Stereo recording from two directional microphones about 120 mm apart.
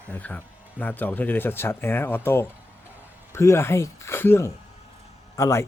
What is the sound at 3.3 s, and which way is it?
A man's voice, 25° left (ahead or behind).